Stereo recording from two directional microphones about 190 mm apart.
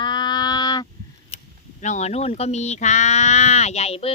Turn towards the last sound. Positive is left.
turn(degrees=30)  # may be behind; listen again after turning